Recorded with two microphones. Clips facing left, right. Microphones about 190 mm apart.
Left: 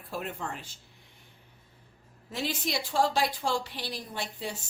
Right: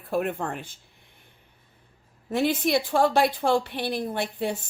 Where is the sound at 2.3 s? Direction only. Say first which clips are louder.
Right 10 dB; 55° right (ahead or behind).